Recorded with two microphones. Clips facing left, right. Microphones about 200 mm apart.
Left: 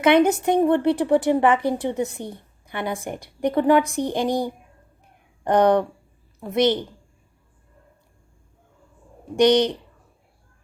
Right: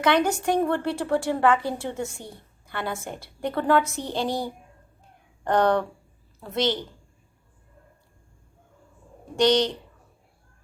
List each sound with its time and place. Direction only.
0.0 s a woman's voice: 20° left (ahead or behind)
9.3 s a woman's voice: 20° left (ahead or behind)